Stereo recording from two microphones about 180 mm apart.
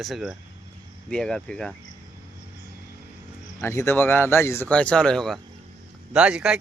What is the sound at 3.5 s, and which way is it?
Speech, 15° left (ahead or behind).